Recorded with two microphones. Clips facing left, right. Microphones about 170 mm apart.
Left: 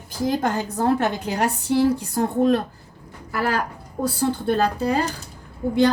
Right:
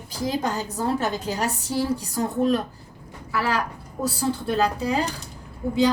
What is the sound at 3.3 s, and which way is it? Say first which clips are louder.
Speech: left 1 dB; 55° left (ahead or behind).